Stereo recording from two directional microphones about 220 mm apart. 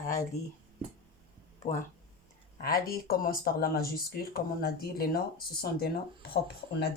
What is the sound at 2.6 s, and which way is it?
Speech, 40° left (ahead or behind).